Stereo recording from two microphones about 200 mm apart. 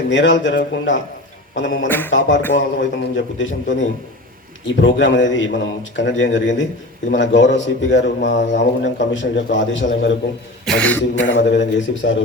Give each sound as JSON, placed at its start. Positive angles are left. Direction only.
{"t": 0.1, "sound": "a man's voice", "side_deg": 70}
{"t": 10.7, "sound": "throat clearing", "side_deg": 5}
{"t": 11.2, "sound": "a man's voice", "side_deg": 65}